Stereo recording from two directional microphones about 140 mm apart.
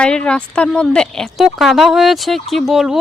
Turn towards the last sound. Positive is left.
turn(degrees=-5)  # may be behind; listen again after turning